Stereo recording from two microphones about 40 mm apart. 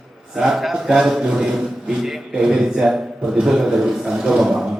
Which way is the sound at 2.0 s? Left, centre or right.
Centre.